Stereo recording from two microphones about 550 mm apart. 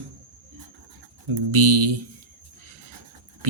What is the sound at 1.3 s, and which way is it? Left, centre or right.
Speech, right.